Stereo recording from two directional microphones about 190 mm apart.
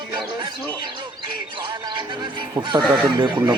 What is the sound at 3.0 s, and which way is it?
Speech, 25° right (ahead or behind).